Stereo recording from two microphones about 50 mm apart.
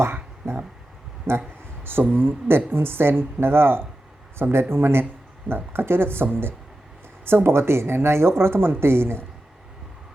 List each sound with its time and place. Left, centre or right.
0.0 s a sound: right
1.3 s speech: right
1.8 s speech: right